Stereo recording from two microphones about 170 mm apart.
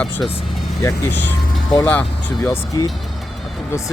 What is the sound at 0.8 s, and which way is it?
Speech, 20° left (ahead or behind).